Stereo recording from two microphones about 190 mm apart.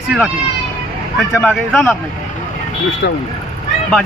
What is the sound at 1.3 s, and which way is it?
Speech, 10° left (ahead or behind).